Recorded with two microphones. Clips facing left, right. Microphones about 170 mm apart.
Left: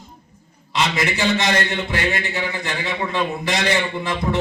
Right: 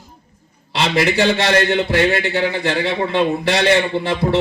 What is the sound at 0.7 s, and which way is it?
A man's voice, 35° right (ahead or behind).